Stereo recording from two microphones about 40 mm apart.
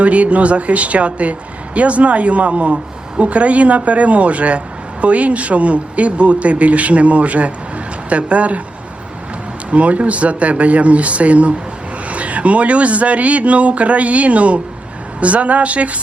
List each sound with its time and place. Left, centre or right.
0.0 s speech: right
9.7 s speech: right